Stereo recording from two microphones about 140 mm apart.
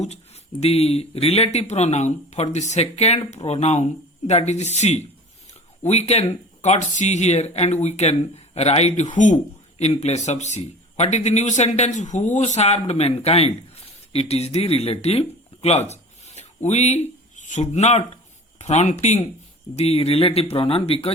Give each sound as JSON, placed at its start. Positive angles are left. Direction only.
{"t": 0.6, "sound": "speech", "side_deg": 45}
{"t": 9.1, "sound": "speech", "side_deg": 60}